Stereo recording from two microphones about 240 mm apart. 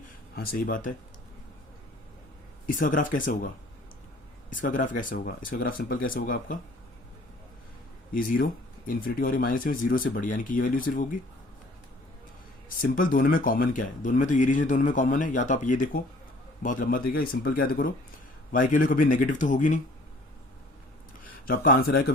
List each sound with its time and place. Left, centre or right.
0.3 s speech: left
2.6 s speech: left
8.1 s speech: left
12.6 s speech: left
21.4 s speech: left